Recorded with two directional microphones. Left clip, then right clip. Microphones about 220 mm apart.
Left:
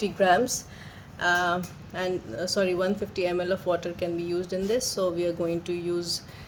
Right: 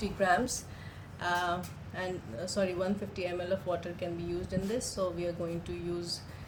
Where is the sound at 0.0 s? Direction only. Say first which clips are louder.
Left 7 dB; 40° left (ahead or behind).